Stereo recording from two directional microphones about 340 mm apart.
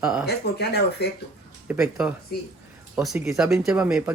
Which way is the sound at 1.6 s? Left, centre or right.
Centre.